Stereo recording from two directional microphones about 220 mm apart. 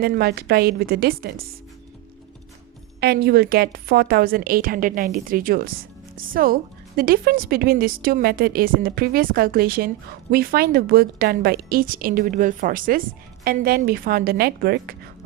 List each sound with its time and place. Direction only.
0.0 s speech: 45° right (ahead or behind)
3.0 s a woman's voice: 45° right (ahead or behind)